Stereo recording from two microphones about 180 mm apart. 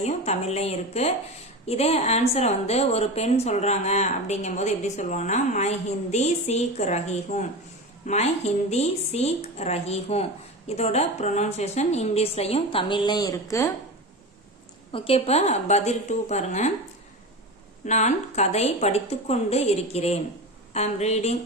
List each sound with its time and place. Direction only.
0.0 s a woman's voice: 35° left (ahead or behind); by 13.7 s 20° left (ahead or behind)
14.9 s a woman's voice: 30° left (ahead or behind)
17.8 s a woman's voice: 40° left (ahead or behind)